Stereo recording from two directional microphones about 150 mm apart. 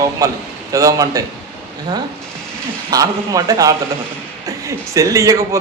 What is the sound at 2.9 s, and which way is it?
Speech, 25° right (ahead or behind).